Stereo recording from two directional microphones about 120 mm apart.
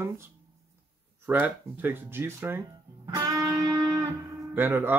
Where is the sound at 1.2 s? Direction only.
15° right (ahead or behind).